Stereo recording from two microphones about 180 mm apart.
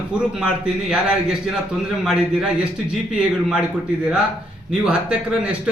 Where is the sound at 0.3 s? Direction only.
5° right (ahead or behind).